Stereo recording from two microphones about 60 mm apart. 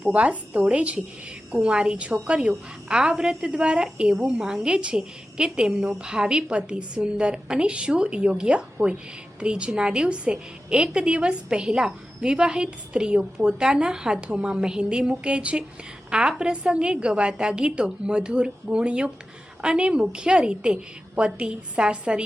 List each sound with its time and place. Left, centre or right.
0.1 s a woman's voice: right